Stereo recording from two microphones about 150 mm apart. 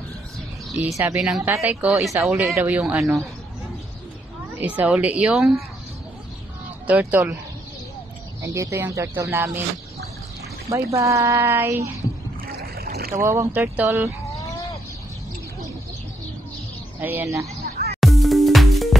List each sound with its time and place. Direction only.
0.9 s a woman's voice: 10° right (ahead or behind)
4.6 s a woman's voice: 10° right (ahead or behind)
6.9 s a woman's voice: 10° right (ahead or behind)
8.4 s a woman's voice: 20° right (ahead or behind)
10.7 s a woman's voice: 20° right (ahead or behind)
12.5 s boat: 90° right
13.1 s a woman's voice: 20° right (ahead or behind)
17.0 s a woman's voice: 15° right (ahead or behind)
17.6 s music: 90° right
18.0 s music: centre (ahead or behind)